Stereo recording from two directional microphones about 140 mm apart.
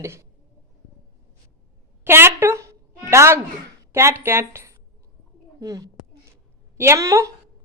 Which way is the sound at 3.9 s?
20° right (ahead or behind).